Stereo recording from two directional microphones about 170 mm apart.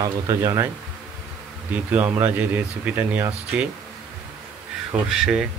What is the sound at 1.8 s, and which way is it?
Speech, 10° right (ahead or behind).